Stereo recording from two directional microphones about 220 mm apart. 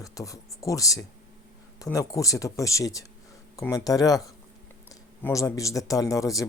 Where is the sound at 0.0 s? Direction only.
15° left (ahead or behind).